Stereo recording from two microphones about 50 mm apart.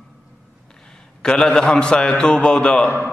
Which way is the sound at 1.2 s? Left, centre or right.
Centre.